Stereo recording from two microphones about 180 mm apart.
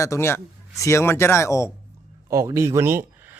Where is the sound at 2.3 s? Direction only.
15° right (ahead or behind).